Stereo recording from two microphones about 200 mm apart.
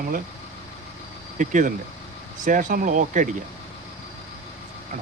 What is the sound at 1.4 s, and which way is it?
Speech, 40° right (ahead or behind).